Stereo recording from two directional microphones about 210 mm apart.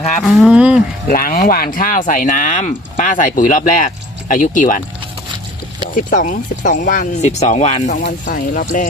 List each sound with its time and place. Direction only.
0.2 s cattle: centre (ahead or behind)
1.1 s speech: 40° left (ahead or behind)
6.1 s speech: 40° left (ahead or behind)